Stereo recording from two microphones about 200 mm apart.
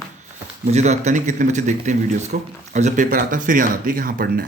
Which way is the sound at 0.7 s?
35° right (ahead or behind).